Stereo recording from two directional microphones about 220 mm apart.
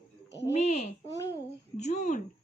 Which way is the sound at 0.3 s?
50° left (ahead or behind).